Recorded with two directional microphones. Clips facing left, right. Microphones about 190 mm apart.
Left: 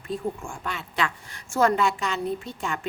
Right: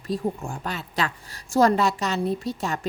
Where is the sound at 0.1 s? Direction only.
35° right (ahead or behind).